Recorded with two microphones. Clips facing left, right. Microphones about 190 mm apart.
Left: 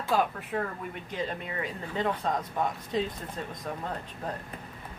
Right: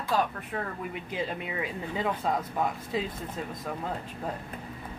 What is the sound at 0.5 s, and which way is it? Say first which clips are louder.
Speech: left 2 dB; centre (ahead or behind).